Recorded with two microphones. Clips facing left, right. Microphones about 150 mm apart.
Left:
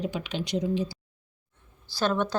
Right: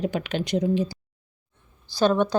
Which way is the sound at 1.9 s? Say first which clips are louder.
Right 6 dB; 15° right (ahead or behind).